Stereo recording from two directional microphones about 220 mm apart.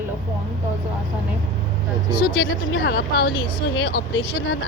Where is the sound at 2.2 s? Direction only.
40° left (ahead or behind).